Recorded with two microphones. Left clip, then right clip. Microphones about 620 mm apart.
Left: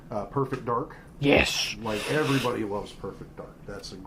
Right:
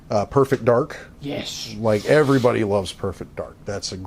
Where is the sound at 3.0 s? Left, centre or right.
Right.